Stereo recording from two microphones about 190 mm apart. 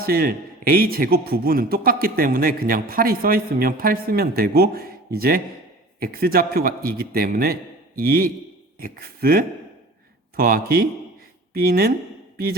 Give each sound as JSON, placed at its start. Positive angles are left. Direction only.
{"t": 0.0, "sound": "a man's voice", "side_deg": -50}